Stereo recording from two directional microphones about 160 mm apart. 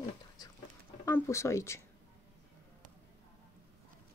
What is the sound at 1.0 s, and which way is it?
Speech, 15° left (ahead or behind).